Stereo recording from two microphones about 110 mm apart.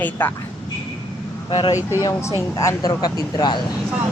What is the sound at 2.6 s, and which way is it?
Speech, 30° left (ahead or behind).